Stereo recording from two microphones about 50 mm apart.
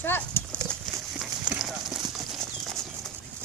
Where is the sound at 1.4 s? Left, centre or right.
Centre.